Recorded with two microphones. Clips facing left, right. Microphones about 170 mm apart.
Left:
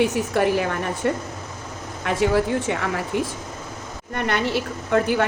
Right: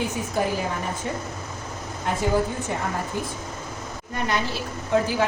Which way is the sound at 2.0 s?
80° left.